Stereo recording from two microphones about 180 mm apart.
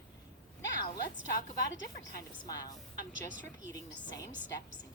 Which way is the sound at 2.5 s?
20° left (ahead or behind).